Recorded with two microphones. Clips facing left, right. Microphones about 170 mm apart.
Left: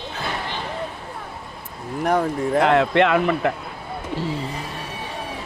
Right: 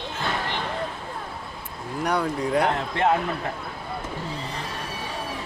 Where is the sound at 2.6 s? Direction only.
75° left (ahead or behind).